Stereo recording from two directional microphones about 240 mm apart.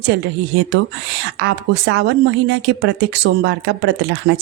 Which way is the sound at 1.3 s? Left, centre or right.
Right.